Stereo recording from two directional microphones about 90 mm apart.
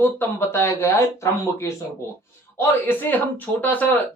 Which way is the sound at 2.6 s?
20° left (ahead or behind).